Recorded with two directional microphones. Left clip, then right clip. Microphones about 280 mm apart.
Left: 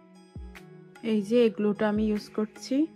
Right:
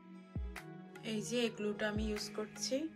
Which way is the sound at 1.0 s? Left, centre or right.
Centre.